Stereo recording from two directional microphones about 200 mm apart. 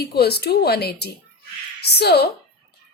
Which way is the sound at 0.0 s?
55° left (ahead or behind).